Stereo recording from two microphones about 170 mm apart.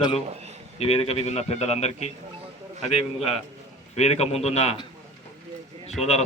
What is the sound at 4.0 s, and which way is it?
Speech, 40° left (ahead or behind).